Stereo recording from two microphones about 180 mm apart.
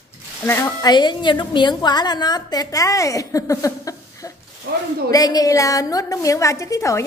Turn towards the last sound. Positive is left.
turn(degrees=15)  # may be behind; listen again after turning